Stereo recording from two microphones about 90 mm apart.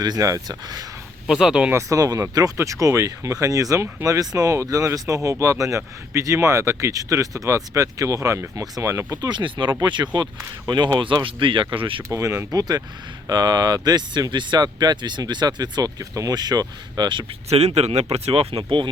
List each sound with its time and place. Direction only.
0.0 s speech: 45° right (ahead or behind)
1.3 s speech: 5° right (ahead or behind)
1.7 s speech: 40° right (ahead or behind)
9.3 s speech: 60° right (ahead or behind)
11.0 s speech: 70° right (ahead or behind)
12.0 s speech: 35° right (ahead or behind)
12.5 s speech: 45° right (ahead or behind)
18.3 s speech: 90° right